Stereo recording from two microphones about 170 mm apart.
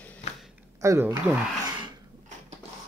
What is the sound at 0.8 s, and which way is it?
Speech, 15° right (ahead or behind).